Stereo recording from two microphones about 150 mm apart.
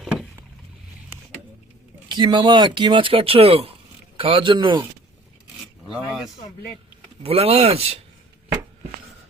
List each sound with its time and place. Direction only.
2.0 s speech: 30° right (ahead or behind)
5.9 s speech: centre (ahead or behind)
7.2 s speech: 40° right (ahead or behind)